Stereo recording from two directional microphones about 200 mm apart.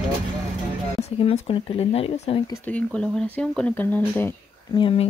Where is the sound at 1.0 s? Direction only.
30° left (ahead or behind).